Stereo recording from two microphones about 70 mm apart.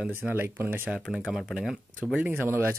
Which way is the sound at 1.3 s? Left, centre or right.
Centre.